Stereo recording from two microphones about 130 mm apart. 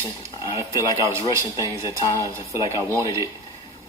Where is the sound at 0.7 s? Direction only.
25° right (ahead or behind).